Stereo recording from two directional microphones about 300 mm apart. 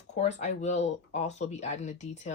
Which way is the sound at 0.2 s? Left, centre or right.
Left.